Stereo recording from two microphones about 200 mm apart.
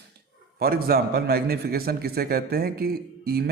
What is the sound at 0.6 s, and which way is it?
Speech, 50° right (ahead or behind).